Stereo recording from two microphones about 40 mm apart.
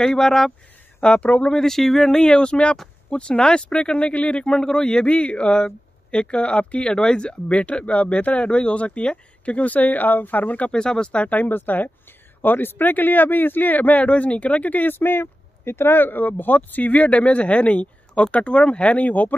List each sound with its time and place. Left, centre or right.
0.0 s speech: centre
1.0 s speech: left
1.5 s speech: centre
4.0 s speech: left; by 5.0 s centre
5.0 s speech: left
10.7 s speech: left
11.2 s speech: left
15.0 s speech: left